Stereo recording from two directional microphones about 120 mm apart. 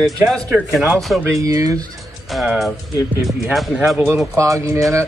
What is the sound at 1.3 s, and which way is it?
Speech, 25° right (ahead or behind).